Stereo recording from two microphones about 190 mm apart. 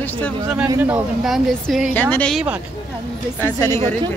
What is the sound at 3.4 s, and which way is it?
Speech, 15° left (ahead or behind).